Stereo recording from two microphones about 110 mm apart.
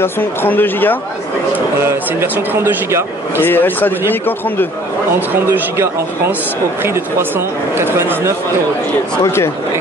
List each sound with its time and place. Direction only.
0.0 s speech: 20° left (ahead or behind)
1.8 s speech: 20° right (ahead or behind)
3.4 s speech: 15° left (ahead or behind)
5.3 s speech: 20° right (ahead or behind)
9.2 s speech: 25° left (ahead or behind)